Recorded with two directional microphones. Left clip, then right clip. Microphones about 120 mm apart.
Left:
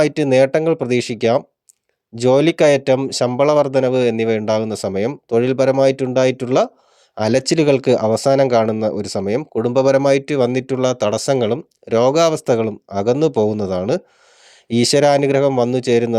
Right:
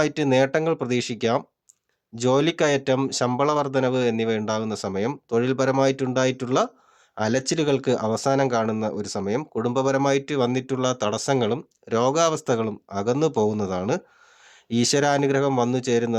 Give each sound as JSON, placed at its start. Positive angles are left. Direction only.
{"t": 0.0, "sound": "speech", "side_deg": 35}